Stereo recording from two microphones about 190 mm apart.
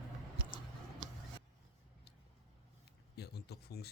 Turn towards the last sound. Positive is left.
turn(degrees=55)  # may be behind; listen again after turning